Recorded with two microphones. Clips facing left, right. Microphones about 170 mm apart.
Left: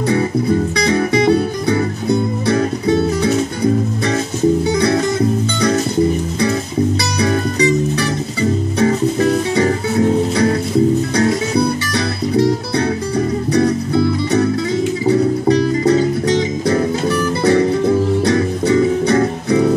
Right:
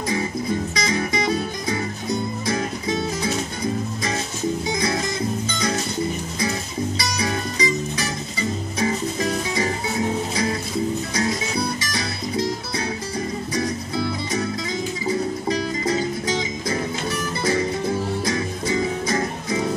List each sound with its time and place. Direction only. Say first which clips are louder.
0.5 s music: left 8 dB; 65° left (ahead or behind)
7.0 s music: left 8 dB; 65° left (ahead or behind)
11.9 s music: left 9 dB; 65° left (ahead or behind)